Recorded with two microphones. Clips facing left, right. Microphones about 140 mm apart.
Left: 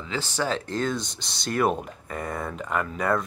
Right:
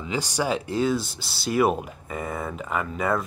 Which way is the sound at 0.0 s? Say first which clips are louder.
Right 2 dB; 15° right (ahead or behind).